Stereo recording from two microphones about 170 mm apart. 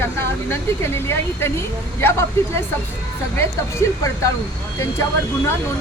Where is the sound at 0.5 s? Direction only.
15° left (ahead or behind).